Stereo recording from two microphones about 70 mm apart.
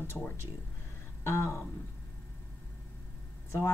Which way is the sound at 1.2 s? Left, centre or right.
Left.